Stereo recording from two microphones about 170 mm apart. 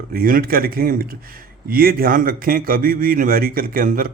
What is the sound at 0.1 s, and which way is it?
Speech, 60° right (ahead or behind).